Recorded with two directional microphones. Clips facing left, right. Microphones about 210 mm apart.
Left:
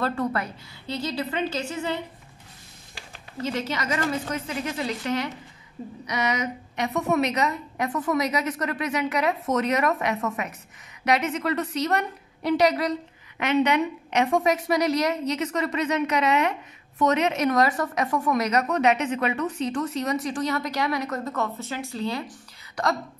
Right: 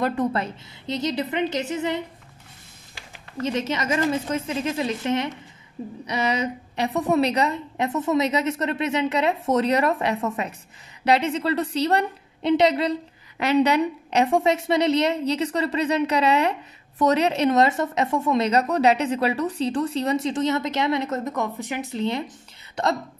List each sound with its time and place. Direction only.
0.0 s a woman's voice: 20° right (ahead or behind)
3.4 s a woman's voice: 20° right (ahead or behind)